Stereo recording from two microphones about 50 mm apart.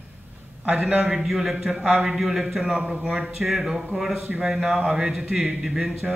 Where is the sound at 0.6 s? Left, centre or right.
Right.